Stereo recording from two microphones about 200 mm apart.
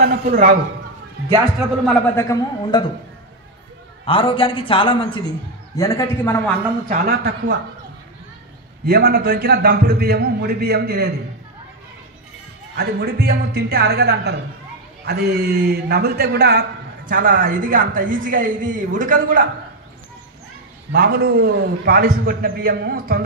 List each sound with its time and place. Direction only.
0.0 s a man's voice: 45° right (ahead or behind)
2.1 s a man's voice: 15° left (ahead or behind)
4.0 s a man's voice: 25° left (ahead or behind)
6.9 s a man's voice: 50° right (ahead or behind)
8.8 s a man's voice: 50° right (ahead or behind)
12.7 s a man's voice: 50° right (ahead or behind)
20.9 s a man's voice: 50° right (ahead or behind)